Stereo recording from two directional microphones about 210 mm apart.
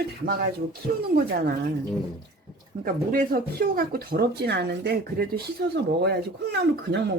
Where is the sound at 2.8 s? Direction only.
40° right (ahead or behind).